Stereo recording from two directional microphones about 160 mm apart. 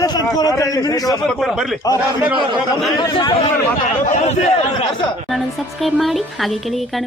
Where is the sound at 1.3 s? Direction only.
Centre (ahead or behind).